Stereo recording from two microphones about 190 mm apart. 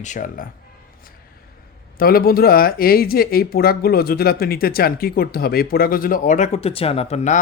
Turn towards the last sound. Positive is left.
turn(degrees=35)  # may be behind; listen again after turning